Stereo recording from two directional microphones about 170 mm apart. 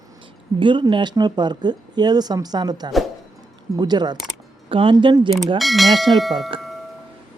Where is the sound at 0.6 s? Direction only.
30° right (ahead or behind).